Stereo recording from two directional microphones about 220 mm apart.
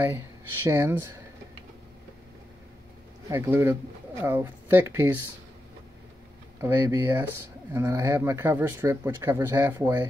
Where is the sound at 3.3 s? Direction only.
10° right (ahead or behind).